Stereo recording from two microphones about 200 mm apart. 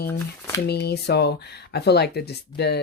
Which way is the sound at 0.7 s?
55° left (ahead or behind).